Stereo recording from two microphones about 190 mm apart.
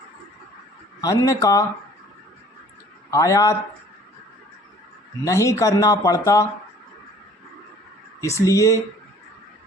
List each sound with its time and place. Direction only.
1.0 s speech: 15° left (ahead or behind)
3.1 s speech: 15° left (ahead or behind)
5.2 s speech: 15° left (ahead or behind)
8.2 s speech: 15° left (ahead or behind)